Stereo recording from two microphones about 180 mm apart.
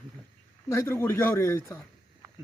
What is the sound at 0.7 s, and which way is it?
Speech, 15° left (ahead or behind).